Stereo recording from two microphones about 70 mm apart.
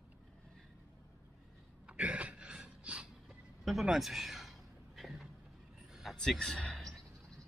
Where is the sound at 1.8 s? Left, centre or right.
Centre.